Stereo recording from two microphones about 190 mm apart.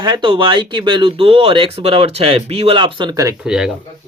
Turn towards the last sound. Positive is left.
turn(degrees=-5)  # may be behind; listen again after turning